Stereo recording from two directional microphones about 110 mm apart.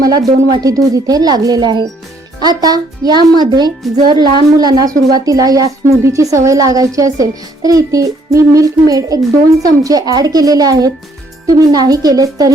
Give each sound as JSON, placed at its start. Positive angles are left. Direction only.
{"t": 0.3, "sound": "speech", "side_deg": -35}